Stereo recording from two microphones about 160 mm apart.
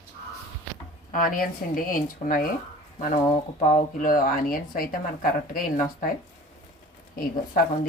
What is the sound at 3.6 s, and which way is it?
A woman's voice, 60° left (ahead or behind).